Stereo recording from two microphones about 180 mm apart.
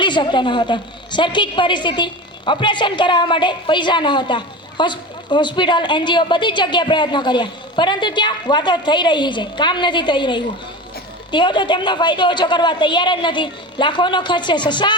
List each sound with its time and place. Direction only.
0.0 s a woman's voice: 25° left (ahead or behind)